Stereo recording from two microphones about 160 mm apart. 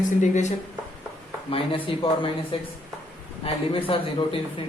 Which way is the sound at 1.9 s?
35° left (ahead or behind).